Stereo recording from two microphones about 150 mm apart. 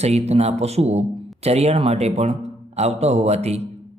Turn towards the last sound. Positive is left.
turn(degrees=-45)  # may be behind; listen again after turning